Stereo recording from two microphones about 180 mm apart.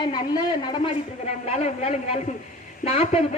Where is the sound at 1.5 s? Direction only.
35° left (ahead or behind).